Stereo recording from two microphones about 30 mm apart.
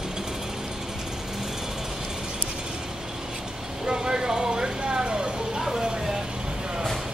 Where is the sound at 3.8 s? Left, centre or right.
Right.